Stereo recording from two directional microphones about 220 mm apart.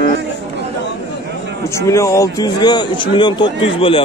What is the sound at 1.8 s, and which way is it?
A man's voice, 15° left (ahead or behind).